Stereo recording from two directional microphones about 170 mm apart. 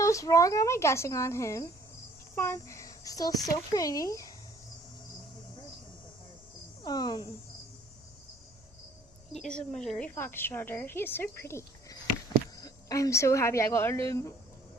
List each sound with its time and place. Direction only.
0.0 s speech: 20° left (ahead or behind)
6.8 s speech: 25° left (ahead or behind)
9.3 s a woman's voice: 5° left (ahead or behind)